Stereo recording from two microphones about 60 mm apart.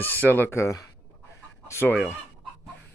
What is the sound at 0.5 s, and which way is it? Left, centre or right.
Speech, left.